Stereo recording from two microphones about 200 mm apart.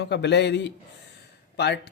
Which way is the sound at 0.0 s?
60° left (ahead or behind).